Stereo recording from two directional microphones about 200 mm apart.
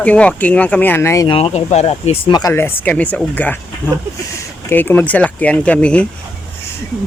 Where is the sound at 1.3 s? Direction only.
30° left (ahead or behind); by 6.0 s 5° left (ahead or behind).